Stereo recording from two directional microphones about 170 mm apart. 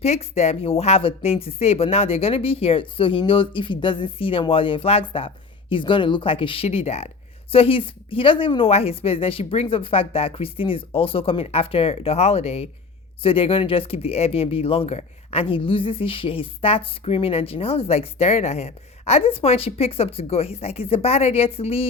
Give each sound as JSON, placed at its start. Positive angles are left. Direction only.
{"t": 0.0, "sound": "speech", "side_deg": 40}